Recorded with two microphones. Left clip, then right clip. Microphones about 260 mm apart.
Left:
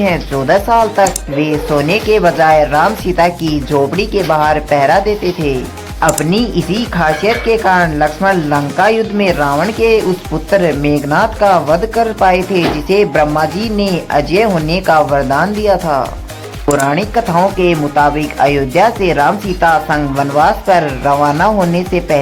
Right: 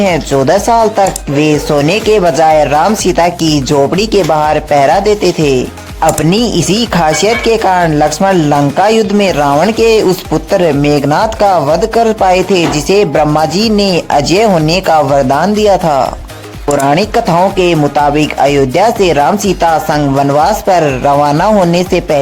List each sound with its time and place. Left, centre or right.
0.0 s speech: right